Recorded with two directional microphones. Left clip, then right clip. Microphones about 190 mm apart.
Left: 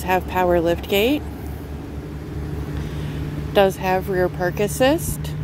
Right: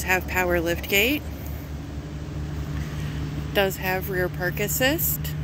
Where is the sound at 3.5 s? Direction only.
35° left (ahead or behind).